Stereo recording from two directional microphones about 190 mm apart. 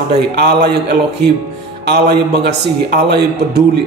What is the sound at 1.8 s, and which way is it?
A man's voice, 60° right (ahead or behind).